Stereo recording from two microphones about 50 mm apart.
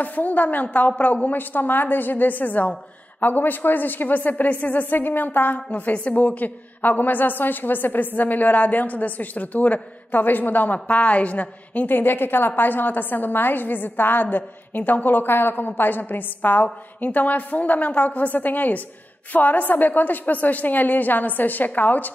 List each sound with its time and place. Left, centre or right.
0.0 s a woman's voice: left